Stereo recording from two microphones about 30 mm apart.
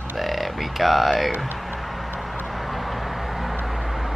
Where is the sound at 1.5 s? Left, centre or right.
Centre.